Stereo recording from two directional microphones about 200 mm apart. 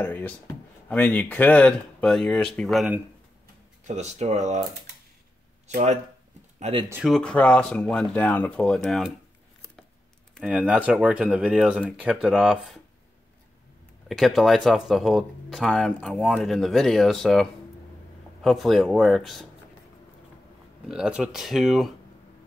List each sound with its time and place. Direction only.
0.0 s speech: 10° left (ahead or behind)
3.8 s speech: 35° right (ahead or behind)
5.7 s speech: 35° right (ahead or behind)
6.6 s speech: 25° right (ahead or behind)
6.9 s speech: 5° right (ahead or behind)
10.4 s speech: 5° right (ahead or behind)
14.0 s speech: centre (ahead or behind)
20.9 s speech: 5° right (ahead or behind)